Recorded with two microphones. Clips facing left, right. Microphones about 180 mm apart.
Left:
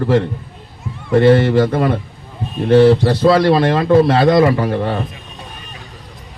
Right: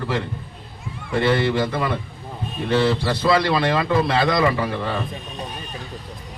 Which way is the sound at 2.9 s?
40° left (ahead or behind).